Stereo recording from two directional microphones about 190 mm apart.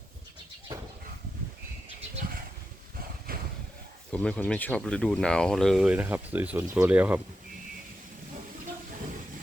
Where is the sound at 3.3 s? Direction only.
50° right (ahead or behind).